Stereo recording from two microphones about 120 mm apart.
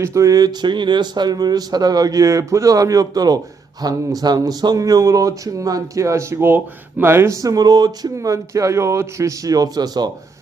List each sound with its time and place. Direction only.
0.0 s speech: 25° right (ahead or behind)